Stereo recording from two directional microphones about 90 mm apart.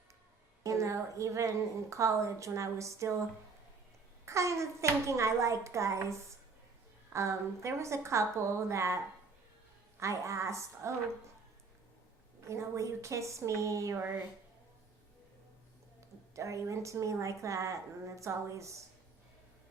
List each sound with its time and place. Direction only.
0.6 s a woman's voice: 35° right (ahead or behind)
4.3 s a woman's voice: 35° right (ahead or behind)
10.0 s a woman's voice: 35° right (ahead or behind)
12.5 s a woman's voice: 35° right (ahead or behind)
16.0 s a woman's voice: 35° right (ahead or behind)